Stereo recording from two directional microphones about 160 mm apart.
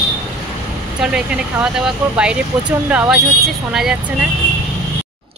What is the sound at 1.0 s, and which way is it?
Speech, 5° right (ahead or behind).